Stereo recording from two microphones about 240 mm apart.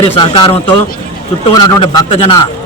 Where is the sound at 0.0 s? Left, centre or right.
Left.